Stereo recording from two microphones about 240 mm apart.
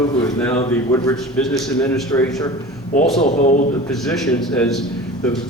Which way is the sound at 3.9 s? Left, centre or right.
Centre.